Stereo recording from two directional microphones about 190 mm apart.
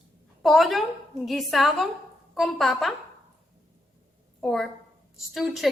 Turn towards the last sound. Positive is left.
turn(degrees=0)  # may be behind; listen again after turning